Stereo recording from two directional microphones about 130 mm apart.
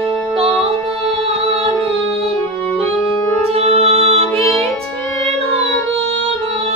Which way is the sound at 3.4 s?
50° right (ahead or behind).